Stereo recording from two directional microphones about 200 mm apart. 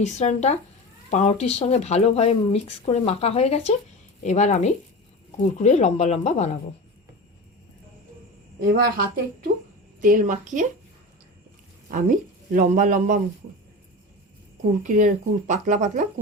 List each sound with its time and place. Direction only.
0.0 s speech: 35° left (ahead or behind)
8.6 s speech: 50° right (ahead or behind)
12.5 s speech: 40° right (ahead or behind)
14.6 s speech: 40° right (ahead or behind)